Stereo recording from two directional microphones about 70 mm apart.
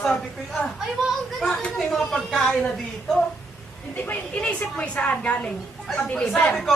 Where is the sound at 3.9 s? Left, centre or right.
Left.